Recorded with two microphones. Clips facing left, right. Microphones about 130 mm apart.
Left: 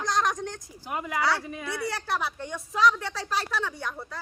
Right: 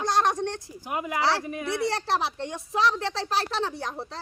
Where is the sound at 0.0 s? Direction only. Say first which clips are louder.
Right 3 dB; 30° right (ahead or behind).